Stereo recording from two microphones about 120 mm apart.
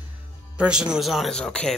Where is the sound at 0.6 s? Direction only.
5° right (ahead or behind).